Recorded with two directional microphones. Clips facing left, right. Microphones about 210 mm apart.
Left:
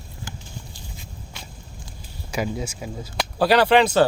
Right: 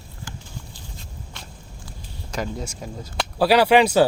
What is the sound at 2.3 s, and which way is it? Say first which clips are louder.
Speech: left 2 dB; 5° left (ahead or behind).